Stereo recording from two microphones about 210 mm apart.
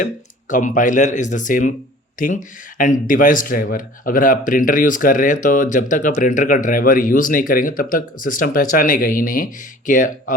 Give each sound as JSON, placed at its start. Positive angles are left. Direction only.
{"t": 0.5, "sound": "speech", "side_deg": 40}